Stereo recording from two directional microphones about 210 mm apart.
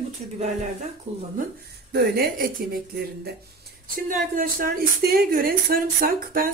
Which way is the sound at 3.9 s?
40° right (ahead or behind).